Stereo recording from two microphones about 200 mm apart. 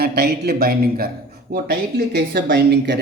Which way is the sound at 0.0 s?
55° right (ahead or behind).